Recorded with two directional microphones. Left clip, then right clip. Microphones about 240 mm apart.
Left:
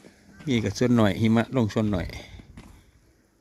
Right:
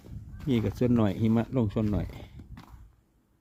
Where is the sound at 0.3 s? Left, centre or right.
Centre.